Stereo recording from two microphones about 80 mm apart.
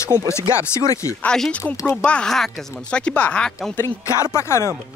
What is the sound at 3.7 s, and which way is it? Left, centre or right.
Speech, left.